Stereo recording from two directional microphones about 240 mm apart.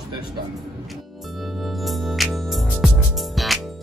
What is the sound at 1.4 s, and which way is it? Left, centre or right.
Music, centre.